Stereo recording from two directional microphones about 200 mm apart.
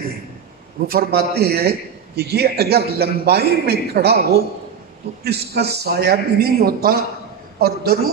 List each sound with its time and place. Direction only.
0.8 s a man's voice: 50° right (ahead or behind)